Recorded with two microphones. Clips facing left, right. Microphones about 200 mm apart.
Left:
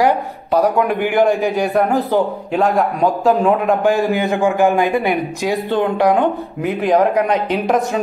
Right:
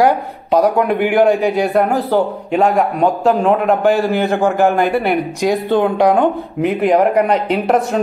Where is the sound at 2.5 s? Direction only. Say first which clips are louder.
Right 2 dB; centre (ahead or behind).